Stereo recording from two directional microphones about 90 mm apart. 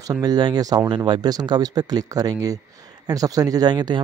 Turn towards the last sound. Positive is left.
turn(degrees=-50)  # may be behind; listen again after turning